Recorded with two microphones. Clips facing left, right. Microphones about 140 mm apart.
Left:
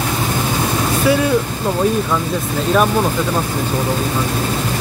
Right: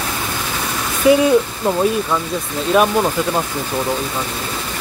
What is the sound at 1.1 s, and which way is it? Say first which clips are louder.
Speech: right 4 dB; 20° right (ahead or behind).